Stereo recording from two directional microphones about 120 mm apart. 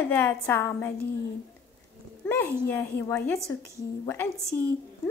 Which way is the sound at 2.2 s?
15° left (ahead or behind).